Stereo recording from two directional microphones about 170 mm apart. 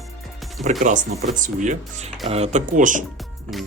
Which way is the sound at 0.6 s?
50° right (ahead or behind).